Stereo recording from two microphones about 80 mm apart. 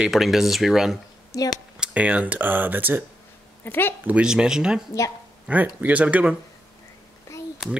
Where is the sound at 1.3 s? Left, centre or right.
Left.